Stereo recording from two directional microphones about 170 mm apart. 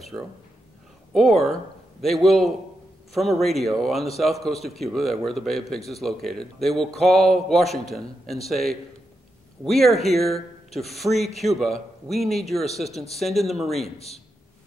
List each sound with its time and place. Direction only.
1.1 s speech: centre (ahead or behind)
7.6 s a man's voice: 40° left (ahead or behind)
8.5 s speech: centre (ahead or behind)
13.9 s a man's voice: 40° left (ahead or behind)